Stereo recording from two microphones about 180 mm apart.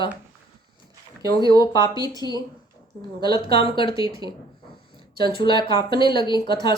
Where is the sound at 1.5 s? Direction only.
25° left (ahead or behind).